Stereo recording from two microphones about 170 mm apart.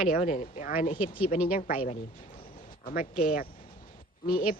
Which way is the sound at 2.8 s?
60° left (ahead or behind).